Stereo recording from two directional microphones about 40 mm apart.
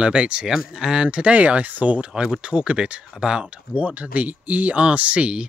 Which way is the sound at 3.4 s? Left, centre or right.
Right.